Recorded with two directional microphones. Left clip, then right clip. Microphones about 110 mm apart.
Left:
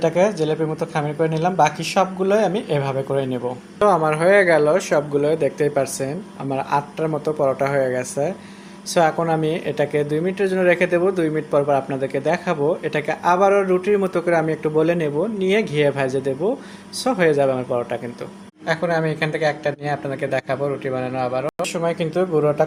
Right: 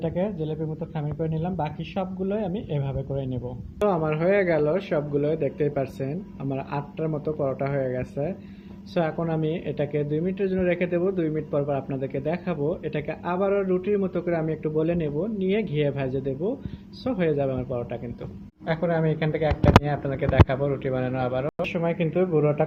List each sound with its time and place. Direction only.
0.0 s speech: 20° left (ahead or behind)